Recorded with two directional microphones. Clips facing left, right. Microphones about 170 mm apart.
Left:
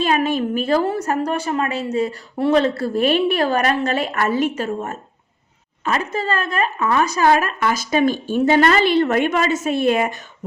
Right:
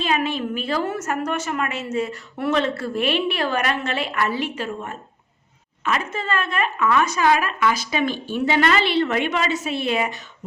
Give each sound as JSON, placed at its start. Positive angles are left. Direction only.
{"t": 0.0, "sound": "a woman's voice", "side_deg": 45}